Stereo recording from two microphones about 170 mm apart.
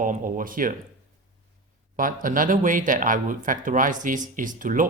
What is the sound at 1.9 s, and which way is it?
Speech, 55° right (ahead or behind).